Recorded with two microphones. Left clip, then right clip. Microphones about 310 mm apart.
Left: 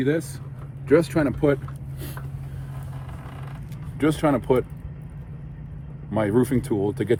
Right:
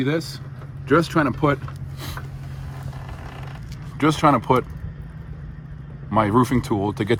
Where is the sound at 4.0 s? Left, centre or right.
Right.